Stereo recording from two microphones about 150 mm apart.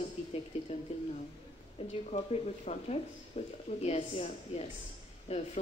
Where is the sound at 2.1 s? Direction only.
50° left (ahead or behind).